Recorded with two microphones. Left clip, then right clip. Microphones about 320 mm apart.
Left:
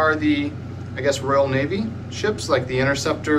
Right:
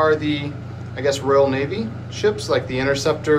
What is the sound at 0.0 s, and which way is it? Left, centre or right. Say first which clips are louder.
Speech: right 1 dB; centre.